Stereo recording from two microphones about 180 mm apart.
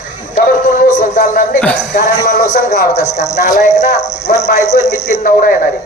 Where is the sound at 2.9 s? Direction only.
40° left (ahead or behind).